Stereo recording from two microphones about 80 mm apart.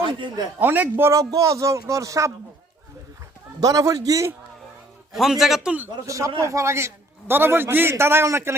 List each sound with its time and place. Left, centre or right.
0.0 s speech: right
0.6 s a man's voice: right
1.1 s speech: right
3.6 s speech: right
5.1 s a man's voice: centre
6.1 s a man's voice: right